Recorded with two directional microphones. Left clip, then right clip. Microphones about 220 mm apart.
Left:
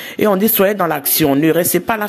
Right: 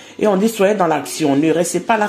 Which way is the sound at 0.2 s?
40° left (ahead or behind).